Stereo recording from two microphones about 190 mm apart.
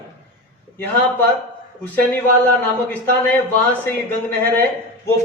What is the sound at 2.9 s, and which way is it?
A man's voice, 10° left (ahead or behind).